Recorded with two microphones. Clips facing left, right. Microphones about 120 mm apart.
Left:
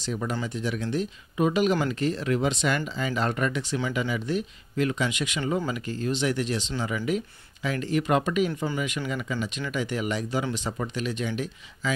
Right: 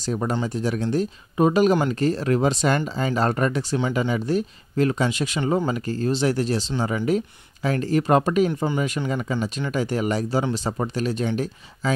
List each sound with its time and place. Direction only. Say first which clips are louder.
0.0 s speech: right 5 dB; 40° right (ahead or behind)